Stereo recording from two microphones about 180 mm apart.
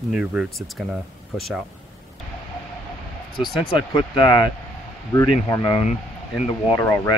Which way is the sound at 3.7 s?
25° left (ahead or behind).